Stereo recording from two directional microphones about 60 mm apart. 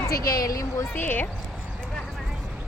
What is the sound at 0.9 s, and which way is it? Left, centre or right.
Speech, left.